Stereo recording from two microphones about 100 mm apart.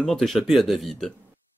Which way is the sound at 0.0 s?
5° left (ahead or behind).